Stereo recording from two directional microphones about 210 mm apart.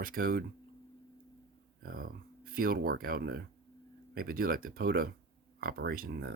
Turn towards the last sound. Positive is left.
turn(degrees=-45)  # may be behind; listen again after turning